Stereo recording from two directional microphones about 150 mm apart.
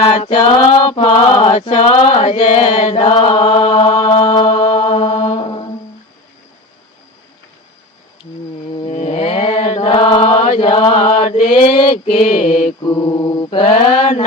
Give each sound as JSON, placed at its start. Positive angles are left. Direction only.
{"t": 0.0, "sound": "chant", "side_deg": 40}
{"t": 5.2, "sound": "music", "side_deg": 30}
{"t": 8.9, "sound": "mantra", "side_deg": 50}
{"t": 11.9, "sound": "a sound", "side_deg": 60}
{"t": 12.8, "sound": "mantra", "side_deg": 30}